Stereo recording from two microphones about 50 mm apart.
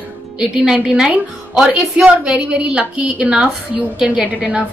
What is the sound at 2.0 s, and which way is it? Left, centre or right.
A woman's voice, centre.